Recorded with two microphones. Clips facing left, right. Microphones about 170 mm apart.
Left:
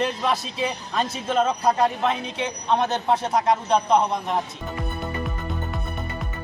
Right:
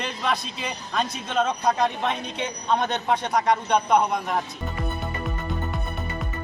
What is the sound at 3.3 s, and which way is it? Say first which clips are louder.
Speech: even; 25° left (ahead or behind).